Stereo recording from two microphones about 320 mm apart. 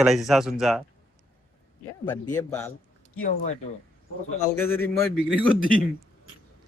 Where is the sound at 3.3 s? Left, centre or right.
Left.